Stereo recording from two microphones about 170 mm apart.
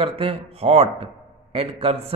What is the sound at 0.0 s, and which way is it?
A man's voice, 35° right (ahead or behind).